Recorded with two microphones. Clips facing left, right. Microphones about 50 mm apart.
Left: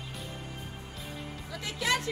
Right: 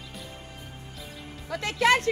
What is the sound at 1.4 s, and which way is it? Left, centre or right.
Speech, right.